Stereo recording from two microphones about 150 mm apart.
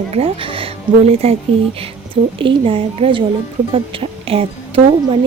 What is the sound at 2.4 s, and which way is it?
Speech, 35° right (ahead or behind).